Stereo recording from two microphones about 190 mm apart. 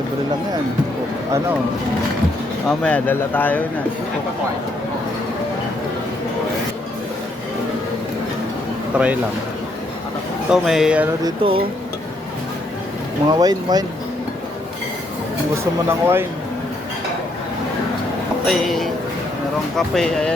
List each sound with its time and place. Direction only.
2.6 s speech: 5° left (ahead or behind)
8.9 s speech: 5° right (ahead or behind)
10.5 s speech: centre (ahead or behind)
11.2 s speech: 25° right (ahead or behind)
13.4 s speech: 20° right (ahead or behind)
15.9 s speech: 10° right (ahead or behind)
18.4 s a man's voice: centre (ahead or behind)